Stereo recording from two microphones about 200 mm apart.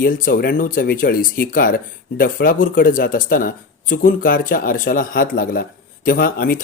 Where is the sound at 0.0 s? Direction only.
45° left (ahead or behind).